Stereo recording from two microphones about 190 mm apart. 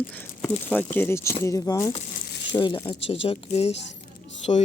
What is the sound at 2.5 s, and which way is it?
Speech, 25° left (ahead or behind).